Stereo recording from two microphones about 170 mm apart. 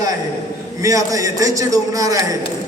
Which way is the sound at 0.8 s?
20° right (ahead or behind).